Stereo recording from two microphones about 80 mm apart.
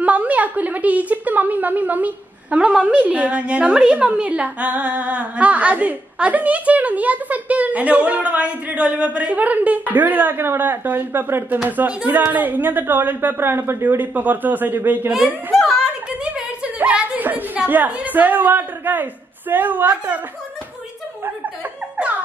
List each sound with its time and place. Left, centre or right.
0.0 s a woman's voice: centre
15.5 s speech: centre
16.3 s speech: centre